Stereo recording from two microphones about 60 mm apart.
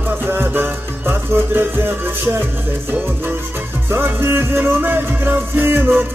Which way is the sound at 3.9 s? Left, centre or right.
Right.